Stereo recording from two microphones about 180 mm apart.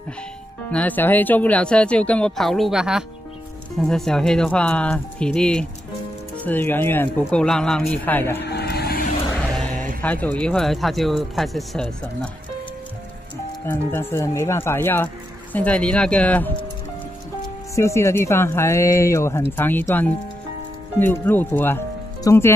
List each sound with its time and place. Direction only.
0.7 s speech: 10° left (ahead or behind)
8.4 s vehicle: 65° left (ahead or behind)
9.4 s a sound: 5° left (ahead or behind)
10.0 s speech: 10° left (ahead or behind)
13.7 s speech: 15° left (ahead or behind)
17.7 s speech: 15° left (ahead or behind)